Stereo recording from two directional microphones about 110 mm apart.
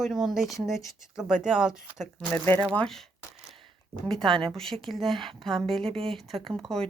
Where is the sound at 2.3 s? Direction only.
15° left (ahead or behind).